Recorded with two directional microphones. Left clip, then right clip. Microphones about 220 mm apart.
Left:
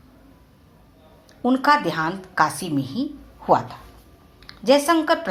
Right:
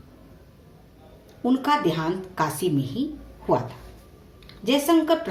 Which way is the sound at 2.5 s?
60° left (ahead or behind).